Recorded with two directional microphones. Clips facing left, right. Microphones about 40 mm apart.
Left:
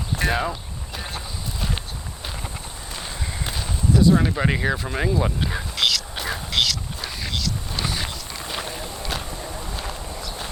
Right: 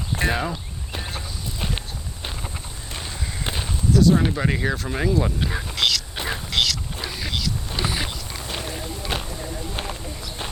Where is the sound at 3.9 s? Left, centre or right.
Left.